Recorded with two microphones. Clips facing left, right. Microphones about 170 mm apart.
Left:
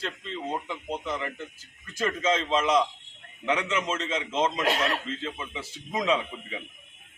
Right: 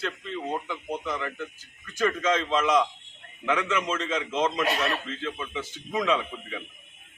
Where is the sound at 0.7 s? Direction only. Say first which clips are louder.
Right 1 dB; 30° left (ahead or behind).